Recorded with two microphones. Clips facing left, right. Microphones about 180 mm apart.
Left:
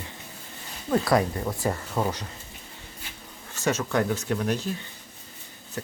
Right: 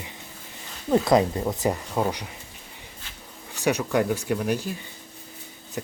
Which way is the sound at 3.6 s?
15° right (ahead or behind).